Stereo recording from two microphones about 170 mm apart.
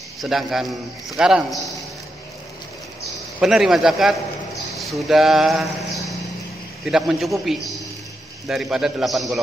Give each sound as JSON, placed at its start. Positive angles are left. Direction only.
{"t": 0.2, "sound": "a man's voice", "side_deg": 0}
{"t": 3.3, "sound": "a man's voice", "side_deg": -5}